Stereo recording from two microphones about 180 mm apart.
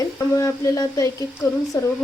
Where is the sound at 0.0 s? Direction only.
20° left (ahead or behind).